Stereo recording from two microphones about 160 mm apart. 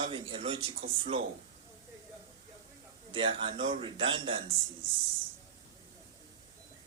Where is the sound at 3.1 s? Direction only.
35° right (ahead or behind).